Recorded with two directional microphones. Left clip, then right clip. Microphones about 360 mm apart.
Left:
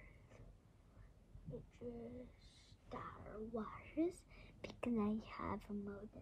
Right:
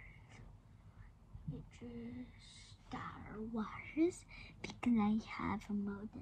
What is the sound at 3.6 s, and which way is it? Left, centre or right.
Whispering, centre.